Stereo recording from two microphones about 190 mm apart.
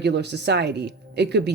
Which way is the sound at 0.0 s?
60° right (ahead or behind).